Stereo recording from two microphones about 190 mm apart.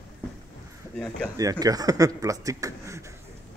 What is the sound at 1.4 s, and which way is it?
Speech, 20° right (ahead or behind).